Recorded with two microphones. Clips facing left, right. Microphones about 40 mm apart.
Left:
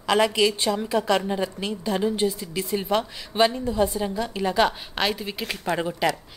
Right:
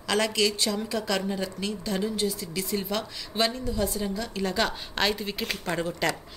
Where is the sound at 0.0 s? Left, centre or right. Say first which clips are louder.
Left 5 dB; centre.